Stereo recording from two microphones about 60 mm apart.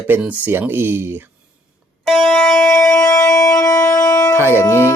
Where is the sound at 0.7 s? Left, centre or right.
Right.